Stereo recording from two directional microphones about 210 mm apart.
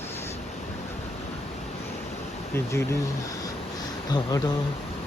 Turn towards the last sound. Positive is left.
turn(degrees=20)  # may be behind; listen again after turning